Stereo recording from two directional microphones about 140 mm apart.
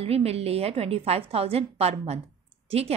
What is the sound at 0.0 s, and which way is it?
A woman's voice, 45° right (ahead or behind).